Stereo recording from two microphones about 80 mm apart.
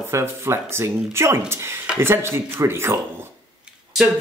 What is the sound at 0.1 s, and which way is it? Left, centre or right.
Speech, right.